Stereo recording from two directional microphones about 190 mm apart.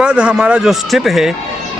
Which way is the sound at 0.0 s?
5° right (ahead or behind).